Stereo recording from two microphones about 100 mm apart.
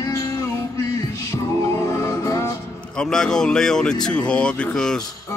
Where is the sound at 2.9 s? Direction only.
5° left (ahead or behind).